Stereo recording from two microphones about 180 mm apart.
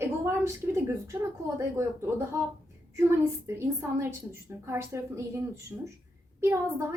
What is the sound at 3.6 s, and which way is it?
Speech, 15° right (ahead or behind).